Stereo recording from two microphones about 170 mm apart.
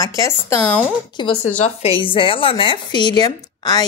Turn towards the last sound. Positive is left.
turn(degrees=25)  # may be behind; listen again after turning